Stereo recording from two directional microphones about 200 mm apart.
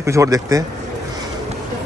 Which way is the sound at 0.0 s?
15° right (ahead or behind).